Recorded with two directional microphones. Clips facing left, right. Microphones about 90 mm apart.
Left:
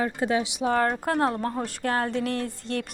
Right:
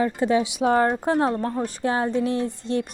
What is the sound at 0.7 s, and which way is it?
Speech, 20° right (ahead or behind).